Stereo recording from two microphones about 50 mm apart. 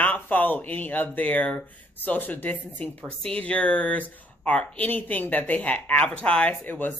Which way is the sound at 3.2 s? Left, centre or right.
Left.